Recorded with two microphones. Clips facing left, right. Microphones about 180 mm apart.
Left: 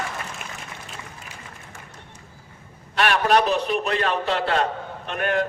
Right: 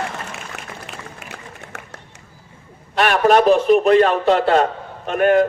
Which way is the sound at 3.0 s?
45° right (ahead or behind).